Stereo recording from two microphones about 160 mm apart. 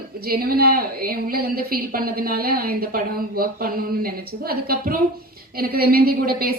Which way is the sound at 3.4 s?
65° right (ahead or behind).